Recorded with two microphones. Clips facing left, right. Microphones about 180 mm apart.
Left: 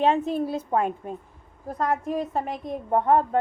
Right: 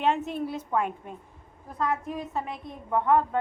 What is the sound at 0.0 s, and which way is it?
A woman's voice, 35° left (ahead or behind).